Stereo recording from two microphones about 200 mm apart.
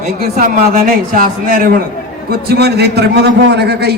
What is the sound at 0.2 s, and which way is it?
A man's voice, 45° right (ahead or behind).